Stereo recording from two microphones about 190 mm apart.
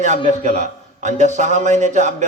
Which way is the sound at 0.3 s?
40° right (ahead or behind).